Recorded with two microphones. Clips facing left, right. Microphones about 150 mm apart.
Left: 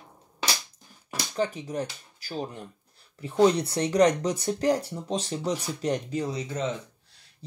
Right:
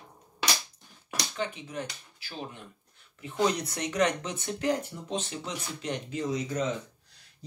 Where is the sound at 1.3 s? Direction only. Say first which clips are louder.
Left 7 dB; 40° left (ahead or behind).